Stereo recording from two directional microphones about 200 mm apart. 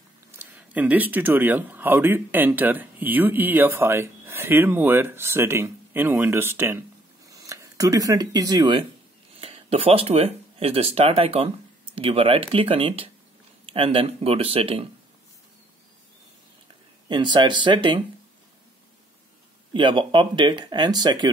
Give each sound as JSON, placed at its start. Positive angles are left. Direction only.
{"t": 0.4, "sound": "speech", "side_deg": -5}
{"t": 17.1, "sound": "speech", "side_deg": -25}
{"t": 19.7, "sound": "speech", "side_deg": -25}